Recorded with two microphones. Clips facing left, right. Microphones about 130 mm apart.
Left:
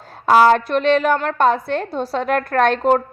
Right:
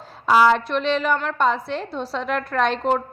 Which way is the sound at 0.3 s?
55° left (ahead or behind).